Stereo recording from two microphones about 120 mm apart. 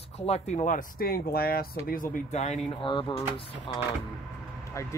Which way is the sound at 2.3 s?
70° left (ahead or behind).